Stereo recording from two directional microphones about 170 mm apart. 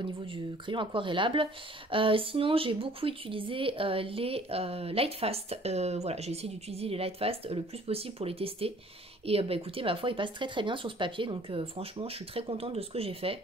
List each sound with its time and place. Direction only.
0.3 s speech: 30° right (ahead or behind)